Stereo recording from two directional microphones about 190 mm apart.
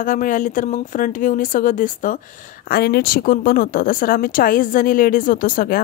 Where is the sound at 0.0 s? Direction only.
45° left (ahead or behind).